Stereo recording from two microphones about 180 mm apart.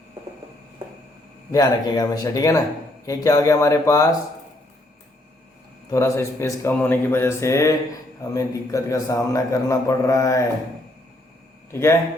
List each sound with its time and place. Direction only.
1.5 s speech: 20° left (ahead or behind)
5.9 s a man's voice: 15° left (ahead or behind)
11.7 s a man's voice: 15° left (ahead or behind)